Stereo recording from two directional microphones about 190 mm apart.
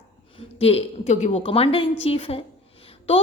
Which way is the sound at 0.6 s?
30° left (ahead or behind).